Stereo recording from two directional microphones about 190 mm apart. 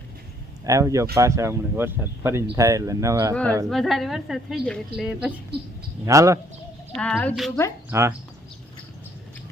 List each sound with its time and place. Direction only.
0.6 s speech: 15° right (ahead or behind)
3.7 s a woman's voice: centre (ahead or behind)
6.1 s speech: 15° right (ahead or behind)
6.9 s a woman's voice: 5° left (ahead or behind)
7.9 s speech: 15° right (ahead or behind)